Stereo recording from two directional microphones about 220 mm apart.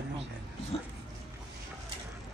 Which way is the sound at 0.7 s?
25° left (ahead or behind).